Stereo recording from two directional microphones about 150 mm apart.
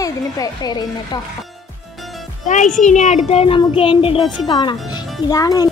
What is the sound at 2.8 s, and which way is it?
Speech, 50° left (ahead or behind).